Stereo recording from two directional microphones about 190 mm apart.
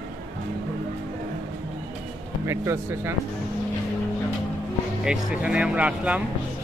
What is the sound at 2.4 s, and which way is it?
Speech, 15° right (ahead or behind).